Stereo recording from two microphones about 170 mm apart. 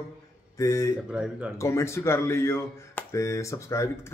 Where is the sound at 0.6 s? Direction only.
20° left (ahead or behind).